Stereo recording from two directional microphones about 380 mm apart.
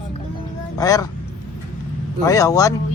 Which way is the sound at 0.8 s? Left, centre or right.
Centre.